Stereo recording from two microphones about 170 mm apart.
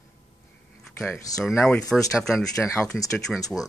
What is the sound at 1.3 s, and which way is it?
Speech, 20° left (ahead or behind).